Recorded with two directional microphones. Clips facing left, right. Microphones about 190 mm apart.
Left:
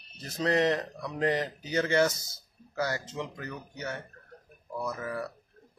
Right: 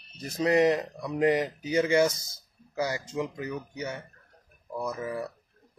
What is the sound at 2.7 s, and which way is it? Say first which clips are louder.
Speech: right 2 dB; 15° right (ahead or behind).